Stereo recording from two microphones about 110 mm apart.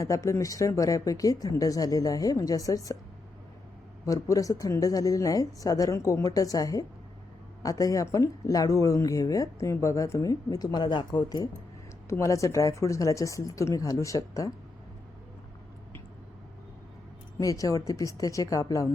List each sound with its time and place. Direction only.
0.0 s speech: 30° left (ahead or behind)
4.0 s speech: 30° left (ahead or behind)
12.0 s speech: 25° left (ahead or behind)
17.3 s speech: 30° left (ahead or behind)